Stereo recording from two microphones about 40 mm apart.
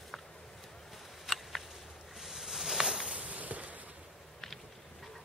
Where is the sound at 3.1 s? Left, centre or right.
Right.